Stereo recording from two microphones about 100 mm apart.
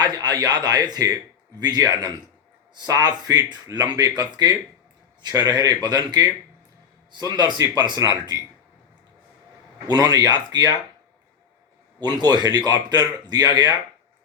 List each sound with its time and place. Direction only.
0.0 s speech: 45° right (ahead or behind)
9.8 s speech: 40° right (ahead or behind)
11.9 s speech: 45° right (ahead or behind)